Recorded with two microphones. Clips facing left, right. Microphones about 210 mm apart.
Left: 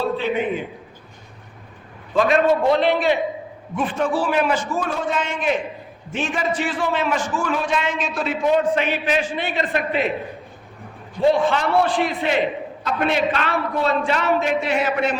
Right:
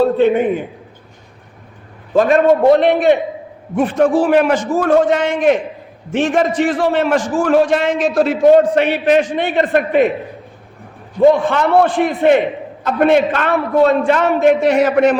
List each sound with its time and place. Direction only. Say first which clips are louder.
0.0 s a man's voice: right 9 dB; 55° right (ahead or behind)
2.1 s a man's voice: right 6 dB; 45° right (ahead or behind); by 8.0 s 75° right (ahead or behind)
8.1 s a man's voice: right 10 dB; 40° right (ahead or behind)
11.2 s a man's voice: right 6 dB; 50° right (ahead or behind)